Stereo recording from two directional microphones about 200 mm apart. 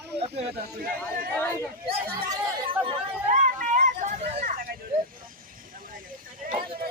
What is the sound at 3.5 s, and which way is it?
Hubbub, 40° right (ahead or behind).